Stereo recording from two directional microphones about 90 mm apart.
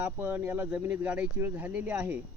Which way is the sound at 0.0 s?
20° right (ahead or behind).